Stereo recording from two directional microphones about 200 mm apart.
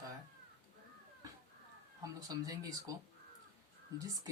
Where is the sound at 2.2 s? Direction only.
20° right (ahead or behind).